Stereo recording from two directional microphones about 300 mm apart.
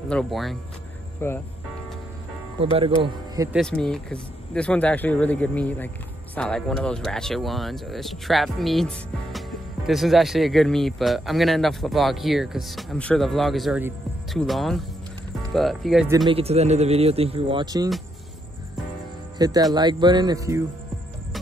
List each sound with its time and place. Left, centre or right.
0.1 s speech: centre
2.6 s speech: centre
3.5 s speech: centre
16.3 s speech: centre
19.3 s speech: centre